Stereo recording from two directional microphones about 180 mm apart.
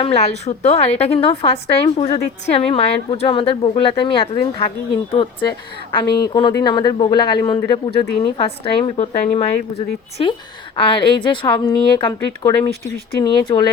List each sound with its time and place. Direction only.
0.0 s a woman's voice: 35° left (ahead or behind)